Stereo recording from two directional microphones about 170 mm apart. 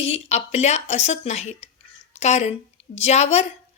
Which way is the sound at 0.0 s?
40° left (ahead or behind).